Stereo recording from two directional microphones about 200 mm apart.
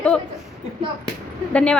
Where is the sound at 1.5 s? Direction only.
5° left (ahead or behind).